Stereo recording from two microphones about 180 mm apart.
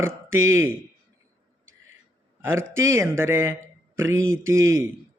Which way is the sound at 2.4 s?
90° right.